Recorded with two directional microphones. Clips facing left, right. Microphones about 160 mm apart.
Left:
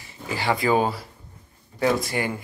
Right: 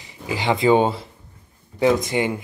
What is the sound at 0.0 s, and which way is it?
Speech, 15° right (ahead or behind).